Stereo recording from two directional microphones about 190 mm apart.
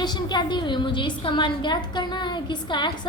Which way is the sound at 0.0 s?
25° left (ahead or behind).